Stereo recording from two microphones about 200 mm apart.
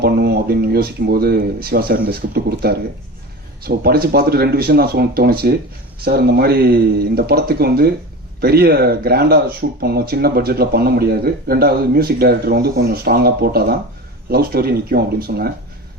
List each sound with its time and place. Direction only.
0.0 s speech: 50° right (ahead or behind)